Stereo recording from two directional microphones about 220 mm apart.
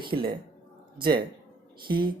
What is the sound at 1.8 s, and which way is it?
Speech, 20° right (ahead or behind).